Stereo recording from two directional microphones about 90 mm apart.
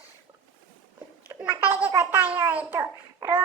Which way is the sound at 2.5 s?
15° right (ahead or behind).